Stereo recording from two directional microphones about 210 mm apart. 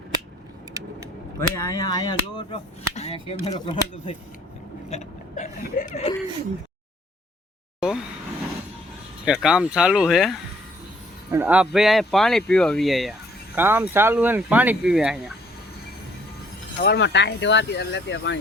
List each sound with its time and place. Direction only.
1.4 s speech: 15° left (ahead or behind)
2.9 s speech: 30° left (ahead or behind)
4.9 s hiccup: 35° left (ahead or behind)
7.8 s vehicle: 5° right (ahead or behind)
9.2 s speech: 5° right (ahead or behind)
16.8 s speech: 55° left (ahead or behind)